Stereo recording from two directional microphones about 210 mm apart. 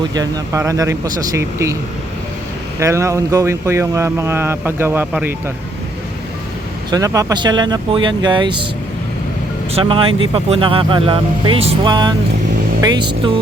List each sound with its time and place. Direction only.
0.0 s speech: 20° right (ahead or behind)
2.7 s speech: 15° right (ahead or behind)
6.9 s speech: 15° right (ahead or behind)
9.7 s speech: 25° right (ahead or behind)